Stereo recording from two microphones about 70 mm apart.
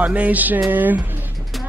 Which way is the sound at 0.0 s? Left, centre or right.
Right.